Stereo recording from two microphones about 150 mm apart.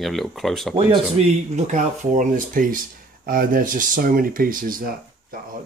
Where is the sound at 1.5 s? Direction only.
50° right (ahead or behind).